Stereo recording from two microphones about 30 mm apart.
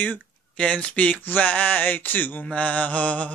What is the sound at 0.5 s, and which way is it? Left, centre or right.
Mantra, left.